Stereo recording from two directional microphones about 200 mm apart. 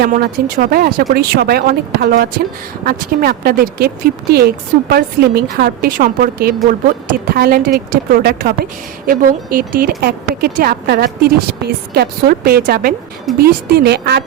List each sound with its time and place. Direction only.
0.0 s a woman's voice: 45° right (ahead or behind)